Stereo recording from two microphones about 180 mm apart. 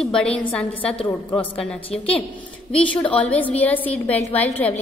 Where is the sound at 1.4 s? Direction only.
5° left (ahead or behind).